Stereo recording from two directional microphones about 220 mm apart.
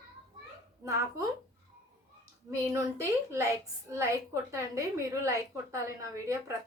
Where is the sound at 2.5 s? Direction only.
10° right (ahead or behind).